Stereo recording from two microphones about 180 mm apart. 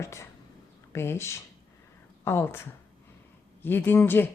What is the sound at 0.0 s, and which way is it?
Speech, 15° left (ahead or behind).